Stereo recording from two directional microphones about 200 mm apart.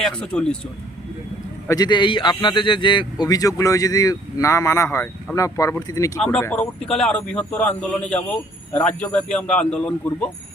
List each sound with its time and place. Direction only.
0.0 s a man's voice: 5° left (ahead or behind)
1.6 s a man's voice: 20° left (ahead or behind)